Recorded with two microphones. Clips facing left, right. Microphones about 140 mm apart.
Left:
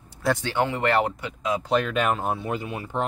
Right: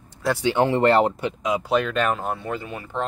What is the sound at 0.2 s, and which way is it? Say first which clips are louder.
Speech: right 1 dB; 5° right (ahead or behind).